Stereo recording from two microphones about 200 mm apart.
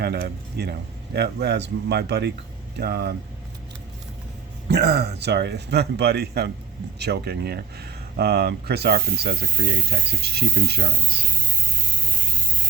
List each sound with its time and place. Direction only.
0.0 s speech: 55° right (ahead or behind)
4.7 s speech: 55° right (ahead or behind)